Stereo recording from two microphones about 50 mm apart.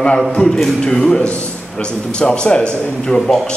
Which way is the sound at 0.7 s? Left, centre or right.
Centre.